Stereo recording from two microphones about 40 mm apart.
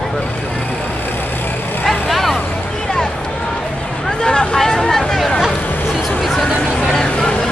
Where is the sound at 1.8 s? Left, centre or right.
Centre.